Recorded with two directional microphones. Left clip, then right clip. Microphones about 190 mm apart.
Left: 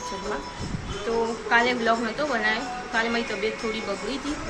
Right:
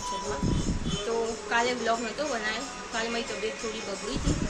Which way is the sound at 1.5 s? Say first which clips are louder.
Left 6 dB; 10° right (ahead or behind).